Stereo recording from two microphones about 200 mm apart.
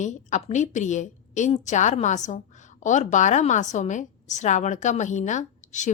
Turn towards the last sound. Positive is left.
turn(degrees=35)  # may be behind; listen again after turning